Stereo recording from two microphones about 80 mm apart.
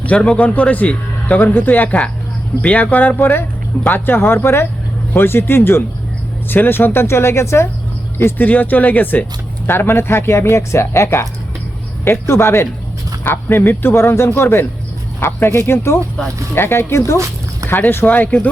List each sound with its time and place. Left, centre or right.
0.1 s a man's voice: centre; by 7.7 s left
8.2 s a man's voice: left